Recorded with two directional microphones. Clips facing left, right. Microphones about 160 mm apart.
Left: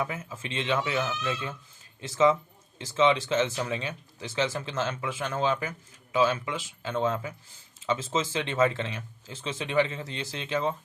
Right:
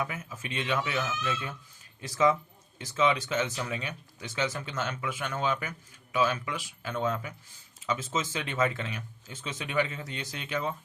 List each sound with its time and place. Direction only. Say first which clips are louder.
0.0 s speech: left 2 dB; 30° left (ahead or behind)